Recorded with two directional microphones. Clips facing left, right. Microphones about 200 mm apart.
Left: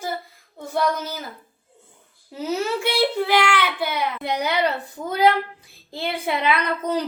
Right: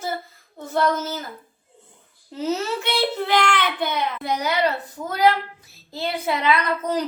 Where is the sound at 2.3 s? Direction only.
10° left (ahead or behind).